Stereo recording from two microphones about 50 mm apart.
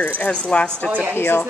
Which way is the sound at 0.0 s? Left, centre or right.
Left.